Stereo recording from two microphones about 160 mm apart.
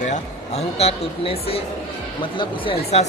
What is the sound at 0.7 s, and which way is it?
Speech, 40° left (ahead or behind).